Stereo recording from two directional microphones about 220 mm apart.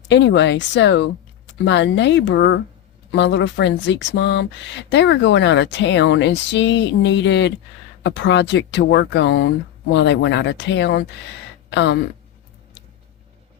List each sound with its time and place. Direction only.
0.1 s speech: 55° left (ahead or behind)